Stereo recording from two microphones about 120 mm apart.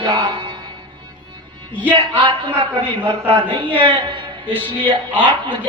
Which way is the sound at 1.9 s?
45° right (ahead or behind).